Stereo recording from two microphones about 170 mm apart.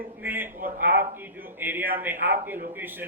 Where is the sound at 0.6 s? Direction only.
55° right (ahead or behind).